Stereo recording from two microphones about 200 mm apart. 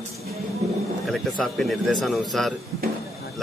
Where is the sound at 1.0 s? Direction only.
Centre (ahead or behind).